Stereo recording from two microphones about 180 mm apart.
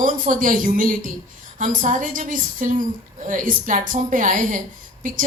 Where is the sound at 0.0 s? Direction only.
50° right (ahead or behind).